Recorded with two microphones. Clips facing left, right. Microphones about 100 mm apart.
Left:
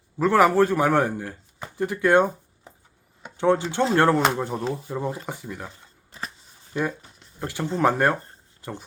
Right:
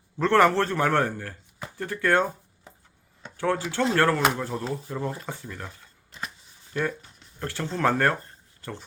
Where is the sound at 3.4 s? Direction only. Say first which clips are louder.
Left 4 dB; 20° left (ahead or behind).